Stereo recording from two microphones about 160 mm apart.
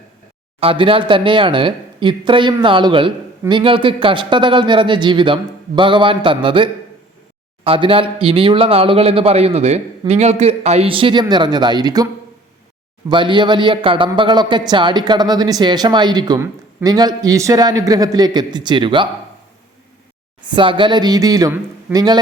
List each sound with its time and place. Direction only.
0.6 s a man's voice: 35° right (ahead or behind)
13.1 s a man's voice: 30° right (ahead or behind)
20.5 s a man's voice: 30° right (ahead or behind)